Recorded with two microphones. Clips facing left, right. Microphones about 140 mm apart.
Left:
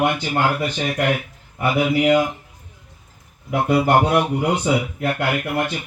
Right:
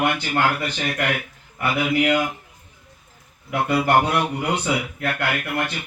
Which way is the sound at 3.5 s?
15° left (ahead or behind).